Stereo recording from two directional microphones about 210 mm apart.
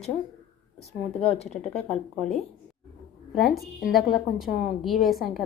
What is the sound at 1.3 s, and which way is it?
Speech, 30° left (ahead or behind).